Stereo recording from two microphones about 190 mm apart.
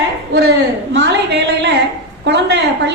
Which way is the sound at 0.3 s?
60° right (ahead or behind).